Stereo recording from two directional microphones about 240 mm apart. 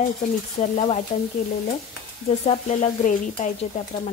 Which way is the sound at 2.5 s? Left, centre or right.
Left.